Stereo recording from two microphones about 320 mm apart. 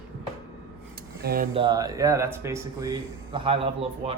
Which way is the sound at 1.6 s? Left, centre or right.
Centre.